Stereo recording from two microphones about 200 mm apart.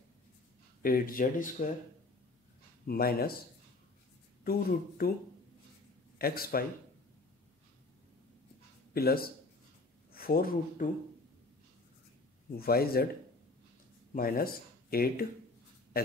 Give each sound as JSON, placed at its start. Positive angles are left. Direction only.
{"t": 0.8, "sound": "speech", "side_deg": 45}
{"t": 2.9, "sound": "speech", "side_deg": 50}
{"t": 4.5, "sound": "speech", "side_deg": 50}
{"t": 6.1, "sound": "speech", "side_deg": 50}
{"t": 8.9, "sound": "speech", "side_deg": 50}
{"t": 12.5, "sound": "speech", "side_deg": 50}
{"t": 14.1, "sound": "speech", "side_deg": 45}